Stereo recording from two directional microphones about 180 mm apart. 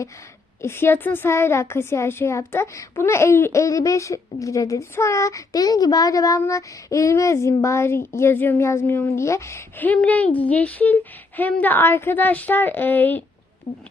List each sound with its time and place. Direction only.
0.6 s a woman's voice: 15° left (ahead or behind)
13.7 s speech: 30° left (ahead or behind)